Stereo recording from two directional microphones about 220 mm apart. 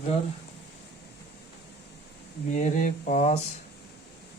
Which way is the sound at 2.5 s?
35° left (ahead or behind).